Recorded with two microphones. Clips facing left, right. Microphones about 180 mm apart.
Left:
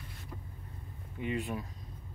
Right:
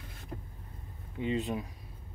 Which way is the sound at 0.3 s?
45° right (ahead or behind).